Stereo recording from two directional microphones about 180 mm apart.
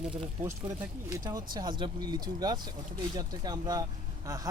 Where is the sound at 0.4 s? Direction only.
20° right (ahead or behind).